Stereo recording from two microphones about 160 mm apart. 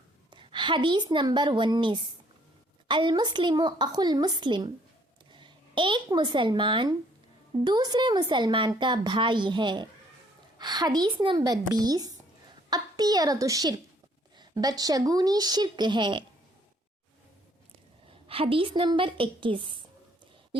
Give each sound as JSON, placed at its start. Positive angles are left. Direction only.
{"t": 0.3, "sound": "a woman's voice", "side_deg": -30}
{"t": 18.3, "sound": "a woman's voice", "side_deg": -35}